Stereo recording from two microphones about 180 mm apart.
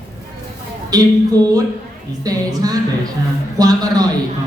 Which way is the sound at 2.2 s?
20° right (ahead or behind).